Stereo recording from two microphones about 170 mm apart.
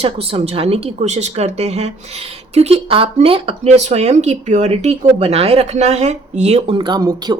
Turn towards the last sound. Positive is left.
turn(degrees=-25)  # may be behind; listen again after turning